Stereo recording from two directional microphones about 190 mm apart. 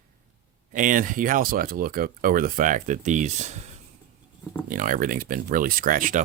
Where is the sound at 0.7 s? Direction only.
45° right (ahead or behind).